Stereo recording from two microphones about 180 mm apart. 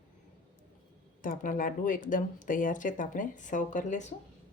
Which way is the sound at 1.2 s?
50° left (ahead or behind).